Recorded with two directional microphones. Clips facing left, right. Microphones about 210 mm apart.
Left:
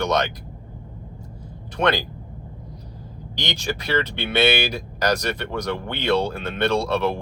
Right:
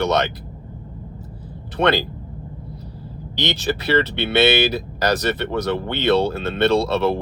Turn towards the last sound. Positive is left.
turn(degrees=10)  # may be behind; listen again after turning